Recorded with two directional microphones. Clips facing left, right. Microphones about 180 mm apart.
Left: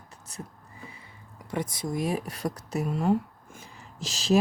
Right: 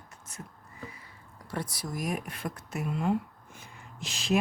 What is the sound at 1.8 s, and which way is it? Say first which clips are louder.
Speech: left 5 dB; 25° left (ahead or behind).